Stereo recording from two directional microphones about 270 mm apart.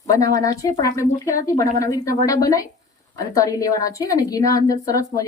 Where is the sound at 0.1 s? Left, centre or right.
Centre.